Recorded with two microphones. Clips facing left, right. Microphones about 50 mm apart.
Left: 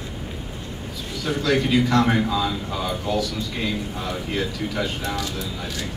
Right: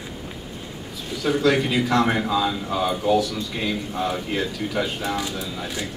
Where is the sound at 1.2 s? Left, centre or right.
Centre.